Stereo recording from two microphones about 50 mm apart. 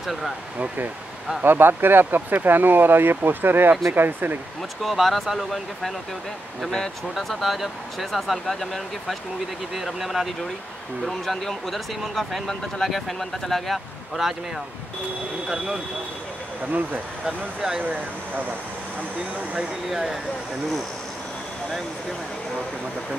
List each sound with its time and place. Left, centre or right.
0.0 s speech: centre
1.4 s speech: right
4.8 s speech: centre
7.2 s speech: centre
15.4 s speech: centre
16.7 s speech: right
19.9 s speech: centre